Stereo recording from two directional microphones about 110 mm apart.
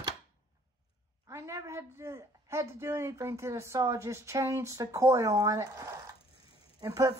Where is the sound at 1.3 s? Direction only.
25° right (ahead or behind).